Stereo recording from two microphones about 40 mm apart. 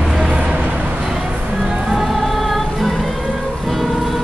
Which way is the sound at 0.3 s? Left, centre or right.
Right.